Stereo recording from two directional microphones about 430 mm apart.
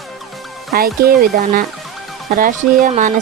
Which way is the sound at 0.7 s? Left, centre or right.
Right.